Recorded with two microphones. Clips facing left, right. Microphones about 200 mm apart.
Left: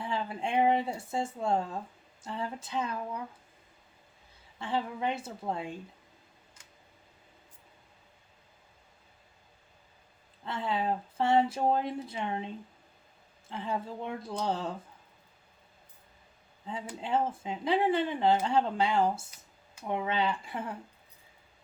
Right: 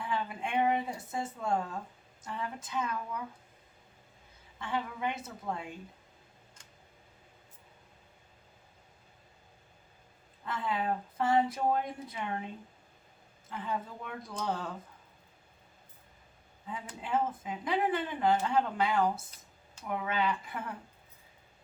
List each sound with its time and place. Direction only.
0.0 s speech: 30° left (ahead or behind)
2.2 s a sound: 30° left (ahead or behind)
4.5 s speech: 30° left (ahead or behind)
10.4 s speech: 30° left (ahead or behind)
13.5 s speech: 30° left (ahead or behind)
17.0 s speech: 30° left (ahead or behind)